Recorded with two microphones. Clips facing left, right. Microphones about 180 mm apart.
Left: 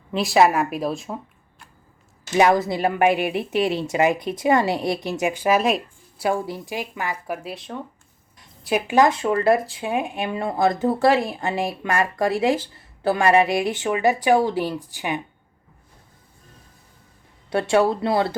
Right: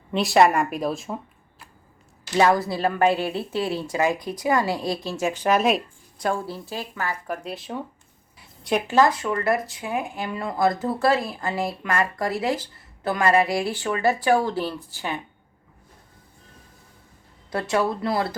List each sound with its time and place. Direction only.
0.1 s speech: centre (ahead or behind)
2.3 s speech: 20° left (ahead or behind)
5.2 s speech: 10° left (ahead or behind)
7.4 s speech: centre (ahead or behind)
9.0 s speech: 25° left (ahead or behind)
17.5 s speech: 25° left (ahead or behind)